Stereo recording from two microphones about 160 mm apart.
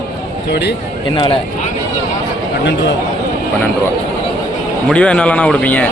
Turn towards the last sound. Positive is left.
turn(degrees=10)  # may be behind; listen again after turning